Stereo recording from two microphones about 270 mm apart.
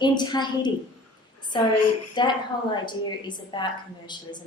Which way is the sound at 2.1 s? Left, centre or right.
Centre.